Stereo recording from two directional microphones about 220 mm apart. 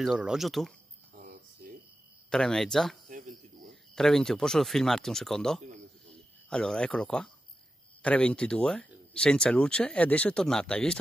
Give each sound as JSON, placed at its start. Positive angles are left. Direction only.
{"t": 0.0, "sound": "speech", "side_deg": -5}
{"t": 1.1, "sound": "a sound", "side_deg": -40}
{"t": 2.2, "sound": "speech", "side_deg": 5}
{"t": 3.1, "sound": "cricket", "side_deg": -35}
{"t": 3.6, "sound": "speech", "side_deg": 0}